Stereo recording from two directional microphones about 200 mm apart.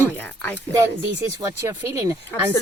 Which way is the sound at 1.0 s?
15° right (ahead or behind).